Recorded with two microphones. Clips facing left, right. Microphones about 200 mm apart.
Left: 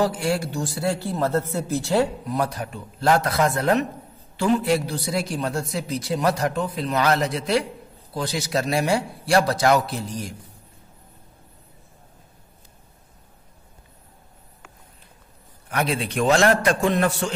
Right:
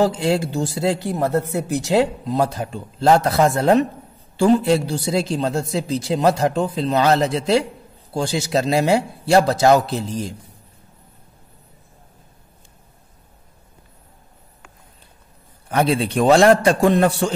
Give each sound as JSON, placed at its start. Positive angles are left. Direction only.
{"t": 0.1, "sound": "speech", "side_deg": -25}
{"t": 15.7, "sound": "a man's voice", "side_deg": -30}